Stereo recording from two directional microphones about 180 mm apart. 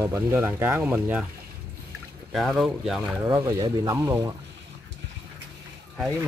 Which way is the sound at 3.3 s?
20° right (ahead or behind).